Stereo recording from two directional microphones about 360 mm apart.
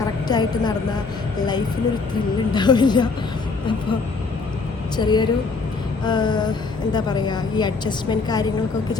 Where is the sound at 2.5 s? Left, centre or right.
Centre.